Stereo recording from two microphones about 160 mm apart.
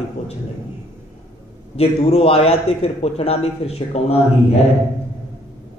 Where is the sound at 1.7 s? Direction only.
40° left (ahead or behind).